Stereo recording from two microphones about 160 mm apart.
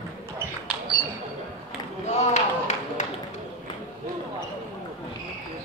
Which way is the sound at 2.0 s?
45° left (ahead or behind).